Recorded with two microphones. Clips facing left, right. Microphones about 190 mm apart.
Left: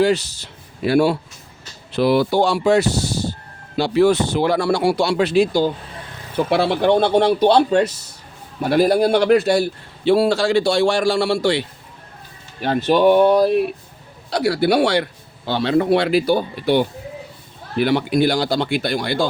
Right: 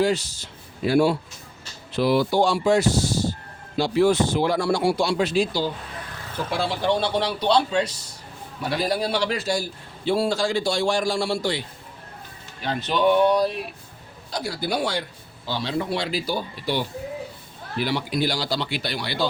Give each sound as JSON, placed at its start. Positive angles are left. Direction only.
{"t": 0.0, "sound": "a man's voice", "side_deg": 70}
{"t": 12.6, "sound": "speech", "side_deg": 50}
{"t": 14.3, "sound": "a man's voice", "side_deg": 70}